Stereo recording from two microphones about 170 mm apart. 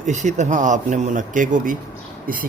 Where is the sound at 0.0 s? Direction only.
45° right (ahead or behind).